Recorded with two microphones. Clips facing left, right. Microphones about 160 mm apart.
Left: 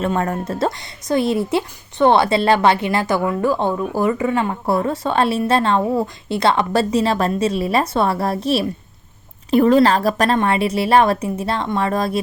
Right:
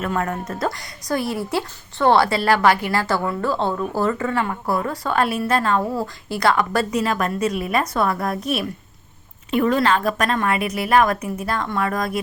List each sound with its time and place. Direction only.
0.0 s a woman's voice: 30° left (ahead or behind)